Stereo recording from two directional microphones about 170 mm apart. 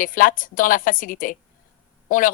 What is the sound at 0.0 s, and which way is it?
Speech, 50° left (ahead or behind).